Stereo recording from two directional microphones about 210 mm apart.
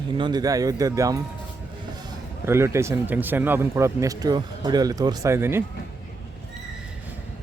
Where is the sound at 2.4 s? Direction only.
10° right (ahead or behind).